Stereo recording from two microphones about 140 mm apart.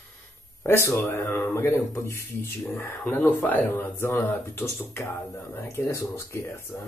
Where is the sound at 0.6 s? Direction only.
20° left (ahead or behind).